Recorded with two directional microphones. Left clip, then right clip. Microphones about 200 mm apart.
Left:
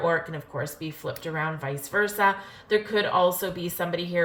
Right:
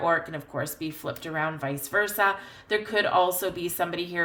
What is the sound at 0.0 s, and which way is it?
Speech, 50° right (ahead or behind).